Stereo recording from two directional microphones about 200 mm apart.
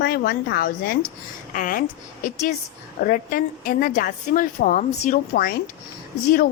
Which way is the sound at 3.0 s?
45° left (ahead or behind).